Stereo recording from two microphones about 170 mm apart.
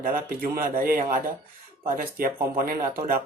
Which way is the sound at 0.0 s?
60° right (ahead or behind).